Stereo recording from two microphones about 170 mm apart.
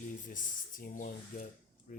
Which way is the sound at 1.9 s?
50° left (ahead or behind).